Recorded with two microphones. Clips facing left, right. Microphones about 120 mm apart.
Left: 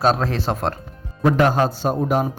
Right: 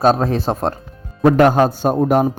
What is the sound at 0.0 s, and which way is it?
A man's voice, 45° right (ahead or behind).